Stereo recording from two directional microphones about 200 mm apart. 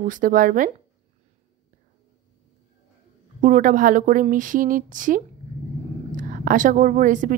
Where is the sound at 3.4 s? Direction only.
40° right (ahead or behind).